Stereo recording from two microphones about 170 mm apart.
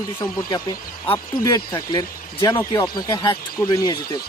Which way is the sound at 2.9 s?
25° left (ahead or behind).